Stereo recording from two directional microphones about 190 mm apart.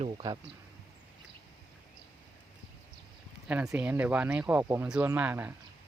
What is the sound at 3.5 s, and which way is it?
Speech, 5° right (ahead or behind).